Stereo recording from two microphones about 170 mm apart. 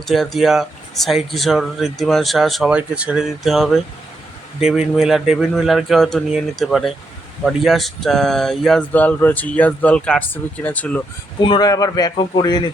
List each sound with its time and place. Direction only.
0.1 s speech: centre (ahead or behind)
11.3 s speech: 25° left (ahead or behind)